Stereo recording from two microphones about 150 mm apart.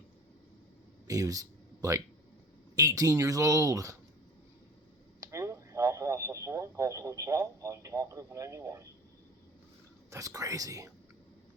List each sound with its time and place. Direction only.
1.0 s speech: 20° right (ahead or behind)
5.2 s speech: 20° right (ahead or behind)
10.1 s speech: 20° right (ahead or behind)